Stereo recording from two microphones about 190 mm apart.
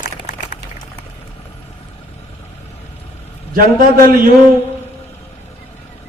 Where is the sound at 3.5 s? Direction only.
50° right (ahead or behind).